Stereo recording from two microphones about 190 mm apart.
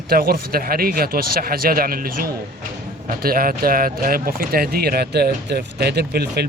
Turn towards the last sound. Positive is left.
turn(degrees=-60)  # may be behind; listen again after turning